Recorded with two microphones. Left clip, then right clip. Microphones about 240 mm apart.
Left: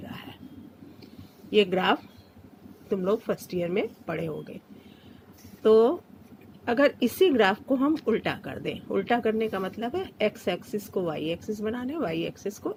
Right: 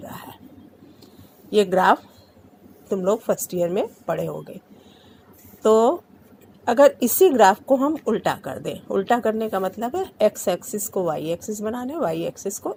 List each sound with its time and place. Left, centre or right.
1.5 s speech: right
5.6 s speech: right